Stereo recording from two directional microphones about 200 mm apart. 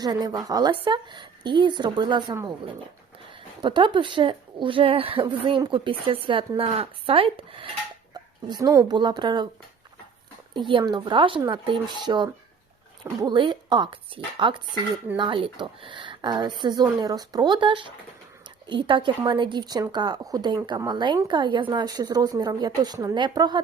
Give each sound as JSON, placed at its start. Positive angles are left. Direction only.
{"t": 0.0, "sound": "speech", "side_deg": -20}
{"t": 3.6, "sound": "a woman's voice", "side_deg": -25}
{"t": 10.5, "sound": "speech", "side_deg": -25}